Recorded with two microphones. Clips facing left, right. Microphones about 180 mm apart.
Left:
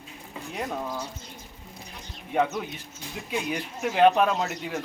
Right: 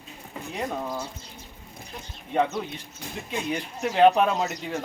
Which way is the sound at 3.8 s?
Centre (ahead or behind).